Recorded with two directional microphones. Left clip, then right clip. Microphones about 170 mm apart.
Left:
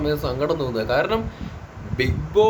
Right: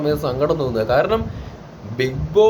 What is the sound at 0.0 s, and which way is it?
A man's voice, 10° left (ahead or behind).